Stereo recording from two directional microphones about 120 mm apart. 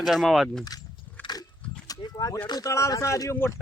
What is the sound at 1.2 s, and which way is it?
Biting, 15° left (ahead or behind).